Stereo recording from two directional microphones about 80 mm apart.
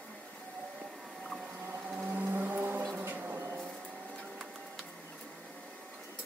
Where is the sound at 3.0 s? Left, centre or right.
Right.